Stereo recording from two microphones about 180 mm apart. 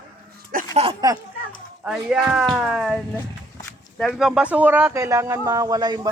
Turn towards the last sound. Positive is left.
turn(degrees=-20)  # may be behind; listen again after turning